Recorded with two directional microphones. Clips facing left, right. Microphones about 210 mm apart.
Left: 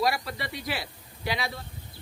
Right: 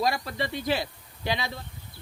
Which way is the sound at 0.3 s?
25° right (ahead or behind).